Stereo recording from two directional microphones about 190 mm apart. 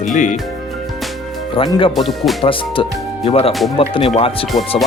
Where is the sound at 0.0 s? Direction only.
40° left (ahead or behind).